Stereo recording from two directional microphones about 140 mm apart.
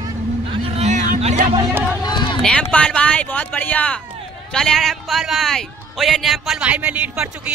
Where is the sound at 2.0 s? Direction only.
35° left (ahead or behind).